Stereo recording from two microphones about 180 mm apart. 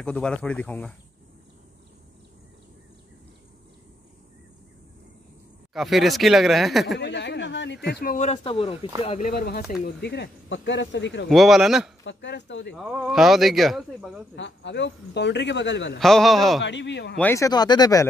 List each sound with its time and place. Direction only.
0.0 s speech: 5° left (ahead or behind)
5.7 s speech: centre (ahead or behind)
7.0 s speech: 75° left (ahead or behind)
7.9 s speech: 50° left (ahead or behind)
8.3 s speech: 30° left (ahead or behind)
9.0 s speech: 40° left (ahead or behind)
9.3 s speech: 55° left (ahead or behind); by 11.2 s 85° left
11.2 s speech: centre (ahead or behind)
12.0 s speech: 80° left
12.7 s speech: centre (ahead or behind)
14.3 s speech: 75° left (ahead or behind)
16.0 s speech: centre (ahead or behind)
16.6 s speech: 80° left
17.2 s speech: 15° left (ahead or behind)